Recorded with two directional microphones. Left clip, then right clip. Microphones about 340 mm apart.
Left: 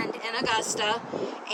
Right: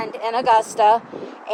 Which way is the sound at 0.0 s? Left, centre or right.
Centre.